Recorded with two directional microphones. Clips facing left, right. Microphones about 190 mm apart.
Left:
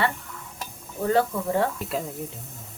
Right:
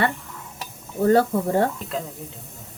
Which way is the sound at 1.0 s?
40° right (ahead or behind).